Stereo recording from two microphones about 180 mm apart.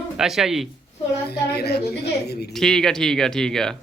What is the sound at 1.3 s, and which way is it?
A woman's voice, 65° left (ahead or behind).